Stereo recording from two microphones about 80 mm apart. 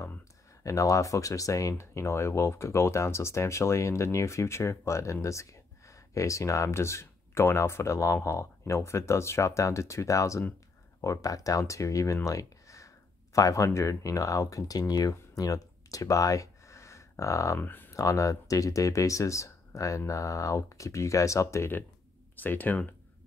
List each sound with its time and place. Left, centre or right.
0.7 s speech: left
17.6 s speech: left
17.9 s speech: left